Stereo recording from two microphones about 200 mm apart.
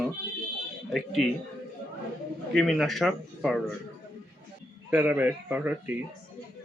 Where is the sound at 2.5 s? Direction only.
Centre (ahead or behind).